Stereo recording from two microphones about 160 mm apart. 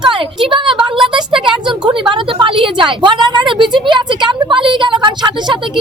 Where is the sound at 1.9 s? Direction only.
30° right (ahead or behind).